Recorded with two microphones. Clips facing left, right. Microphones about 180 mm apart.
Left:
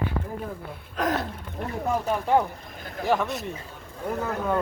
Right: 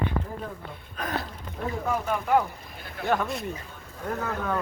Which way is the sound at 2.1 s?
30° left (ahead or behind).